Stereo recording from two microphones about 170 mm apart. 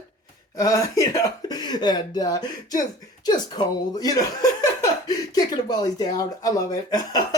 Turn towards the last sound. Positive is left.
turn(degrees=20)  # may be behind; listen again after turning